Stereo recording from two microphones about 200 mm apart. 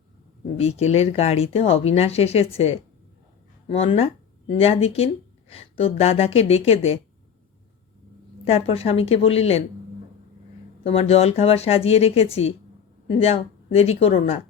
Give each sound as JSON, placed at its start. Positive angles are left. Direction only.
{"t": 0.5, "sound": "speech", "side_deg": 30}
{"t": 8.4, "sound": "speech", "side_deg": 30}
{"t": 10.8, "sound": "speech", "side_deg": 30}